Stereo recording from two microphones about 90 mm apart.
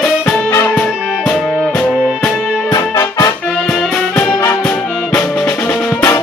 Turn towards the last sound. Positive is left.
turn(degrees=30)  # may be behind; listen again after turning